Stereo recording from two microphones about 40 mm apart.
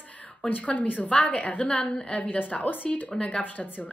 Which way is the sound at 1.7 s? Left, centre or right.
Left.